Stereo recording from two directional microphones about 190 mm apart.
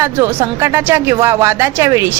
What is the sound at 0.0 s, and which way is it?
A woman's voice, 10° right (ahead or behind).